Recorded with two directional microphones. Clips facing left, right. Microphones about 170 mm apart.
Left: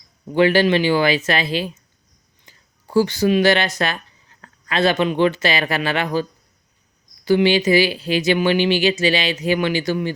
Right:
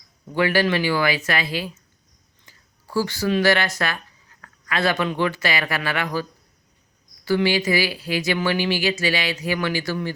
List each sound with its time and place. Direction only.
0.3 s speech: 25° left (ahead or behind)
7.3 s speech: 20° left (ahead or behind)